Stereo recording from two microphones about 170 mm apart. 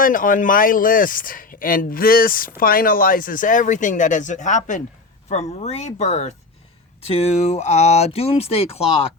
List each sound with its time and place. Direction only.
0.0 s speech: 55° left (ahead or behind); by 8.9 s 35° left (ahead or behind)